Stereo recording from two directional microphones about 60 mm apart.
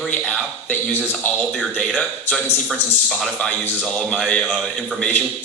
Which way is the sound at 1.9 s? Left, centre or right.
Centre.